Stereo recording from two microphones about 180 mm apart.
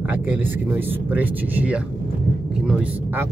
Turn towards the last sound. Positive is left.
turn(degrees=-10)  # may be behind; listen again after turning